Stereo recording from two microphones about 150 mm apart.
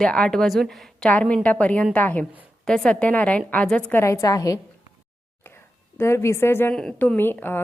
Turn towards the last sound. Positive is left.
turn(degrees=15)  # may be behind; listen again after turning